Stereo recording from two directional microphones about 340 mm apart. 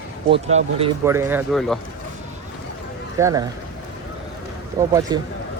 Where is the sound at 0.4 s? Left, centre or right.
Centre.